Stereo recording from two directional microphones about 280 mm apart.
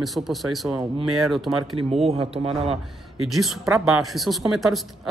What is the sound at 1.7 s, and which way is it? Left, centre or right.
Speech, right.